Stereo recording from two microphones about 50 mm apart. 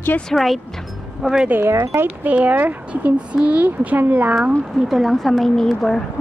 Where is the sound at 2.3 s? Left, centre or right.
Right.